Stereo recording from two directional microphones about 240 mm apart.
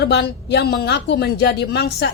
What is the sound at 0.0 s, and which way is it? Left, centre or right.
A woman's voice, left.